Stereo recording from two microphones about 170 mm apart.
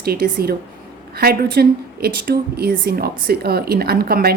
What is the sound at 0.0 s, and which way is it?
A woman's voice, 65° right (ahead or behind).